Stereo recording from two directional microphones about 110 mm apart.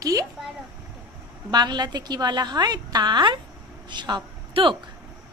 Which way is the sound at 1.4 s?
40° right (ahead or behind).